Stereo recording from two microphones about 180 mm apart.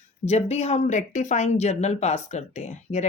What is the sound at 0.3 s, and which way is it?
Speech, 35° left (ahead or behind).